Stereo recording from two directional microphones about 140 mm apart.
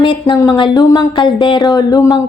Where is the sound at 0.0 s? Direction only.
35° left (ahead or behind).